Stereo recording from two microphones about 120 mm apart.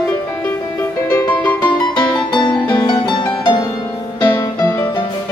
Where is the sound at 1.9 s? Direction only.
40° left (ahead or behind).